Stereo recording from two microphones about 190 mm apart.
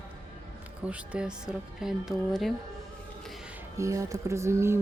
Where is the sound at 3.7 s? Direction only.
15° right (ahead or behind).